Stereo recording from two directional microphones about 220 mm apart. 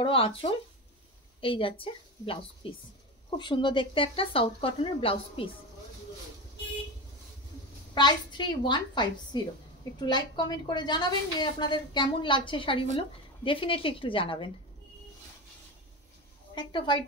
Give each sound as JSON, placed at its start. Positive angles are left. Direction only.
{"t": 0.0, "sound": "a woman's voice", "side_deg": 25}
{"t": 7.9, "sound": "a woman's voice", "side_deg": 20}
{"t": 16.5, "sound": "a woman's voice", "side_deg": 20}